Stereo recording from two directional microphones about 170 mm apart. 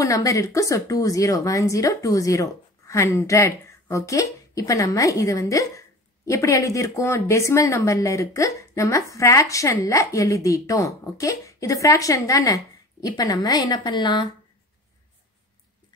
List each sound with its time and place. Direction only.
0.0 s a woman's voice: 20° left (ahead or behind)